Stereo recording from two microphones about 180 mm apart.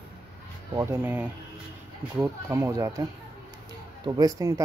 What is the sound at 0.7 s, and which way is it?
Speech, 15° right (ahead or behind).